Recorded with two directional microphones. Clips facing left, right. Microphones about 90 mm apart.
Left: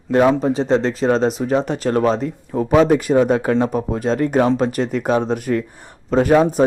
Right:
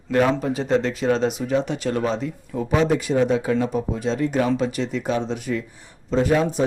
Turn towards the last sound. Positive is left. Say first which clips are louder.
# left 6 dB
turn(degrees=50)  # may be behind; listen again after turning